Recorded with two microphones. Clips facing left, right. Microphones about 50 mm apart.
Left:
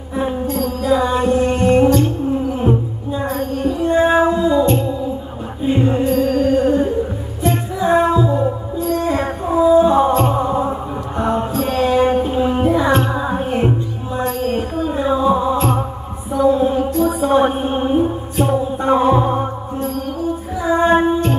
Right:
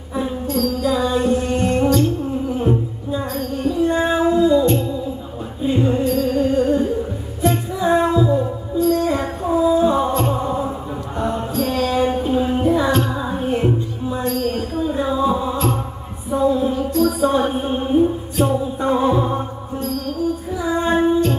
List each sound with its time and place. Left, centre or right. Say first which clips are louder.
0.1 s music: left 2 dB; left
3.3 s music: right 1 dB; left
6.4 s music: left 2 dB; left
7.4 s music: left 1 dB; centre
11.1 s mantra: left 3 dB; left
12.6 s music: left 3 dB; left
15.0 s a sound: left 4 dB; left
16.5 s mantra: left 3 dB; left
20.6 s female singing: left 4 dB; left